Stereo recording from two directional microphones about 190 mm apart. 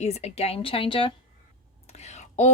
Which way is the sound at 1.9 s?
35° left (ahead or behind).